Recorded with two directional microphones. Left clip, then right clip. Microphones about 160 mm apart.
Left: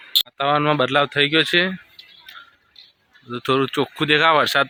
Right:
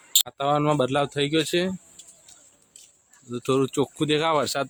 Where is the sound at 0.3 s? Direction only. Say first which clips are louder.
Left 4 dB; 10° right (ahead or behind).